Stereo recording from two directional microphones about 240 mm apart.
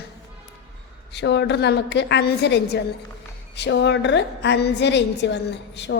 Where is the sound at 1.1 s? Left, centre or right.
Left.